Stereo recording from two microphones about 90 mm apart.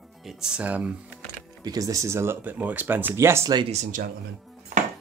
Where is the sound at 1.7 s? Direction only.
40° right (ahead or behind).